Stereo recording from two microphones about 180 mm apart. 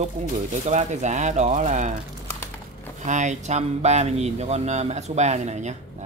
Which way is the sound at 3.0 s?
40° right (ahead or behind).